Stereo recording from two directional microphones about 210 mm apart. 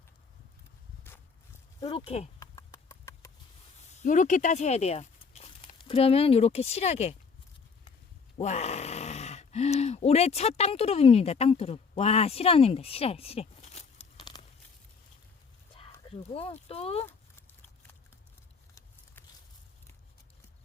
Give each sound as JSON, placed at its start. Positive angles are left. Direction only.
{"t": 1.8, "sound": "speech", "side_deg": 30}
{"t": 2.4, "sound": "horse", "side_deg": 15}
{"t": 3.8, "sound": "speech", "side_deg": 30}
{"t": 8.4, "sound": "speech", "side_deg": 30}
{"t": 16.0, "sound": "speech", "side_deg": 25}